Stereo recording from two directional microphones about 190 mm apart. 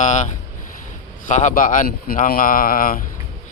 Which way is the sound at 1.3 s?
40° left (ahead or behind).